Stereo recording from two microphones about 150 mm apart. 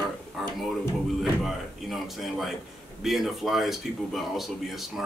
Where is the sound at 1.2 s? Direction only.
Centre (ahead or behind).